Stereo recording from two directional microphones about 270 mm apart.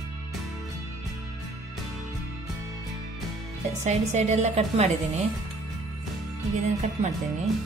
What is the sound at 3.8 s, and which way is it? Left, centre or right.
Speech, right.